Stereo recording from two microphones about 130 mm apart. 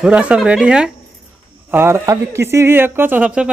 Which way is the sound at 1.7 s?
20° right (ahead or behind).